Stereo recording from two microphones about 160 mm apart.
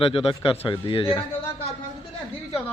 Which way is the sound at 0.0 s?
35° left (ahead or behind).